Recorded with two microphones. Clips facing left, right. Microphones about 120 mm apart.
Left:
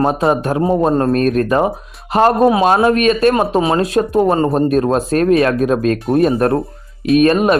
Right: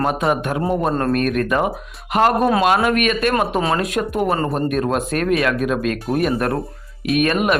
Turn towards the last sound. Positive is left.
turn(degrees=30)  # may be behind; listen again after turning